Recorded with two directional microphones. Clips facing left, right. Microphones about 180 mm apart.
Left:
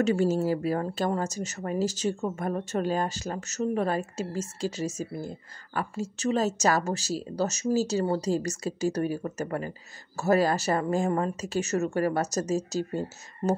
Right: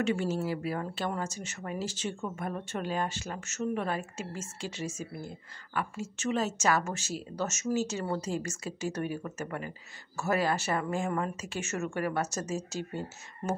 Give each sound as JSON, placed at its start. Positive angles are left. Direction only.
{"t": 0.0, "sound": "a woman's voice", "side_deg": 40}